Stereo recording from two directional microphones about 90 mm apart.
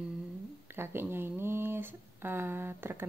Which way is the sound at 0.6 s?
25° right (ahead or behind).